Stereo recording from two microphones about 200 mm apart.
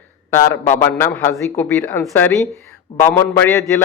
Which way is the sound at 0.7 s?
10° left (ahead or behind).